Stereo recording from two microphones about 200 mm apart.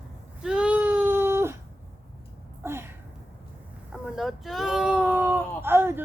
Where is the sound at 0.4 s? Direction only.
5° right (ahead or behind).